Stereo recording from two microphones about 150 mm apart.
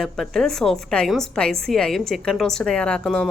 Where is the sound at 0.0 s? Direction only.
5° left (ahead or behind).